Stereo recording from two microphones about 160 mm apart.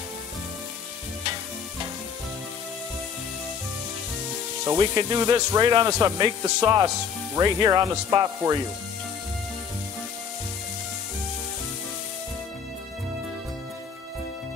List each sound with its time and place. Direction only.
4.6 s speech: 25° right (ahead or behind)